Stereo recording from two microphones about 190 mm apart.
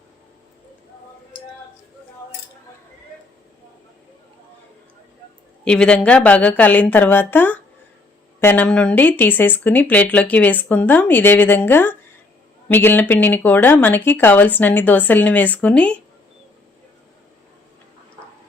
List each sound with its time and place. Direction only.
5.6 s speech: 5° left (ahead or behind)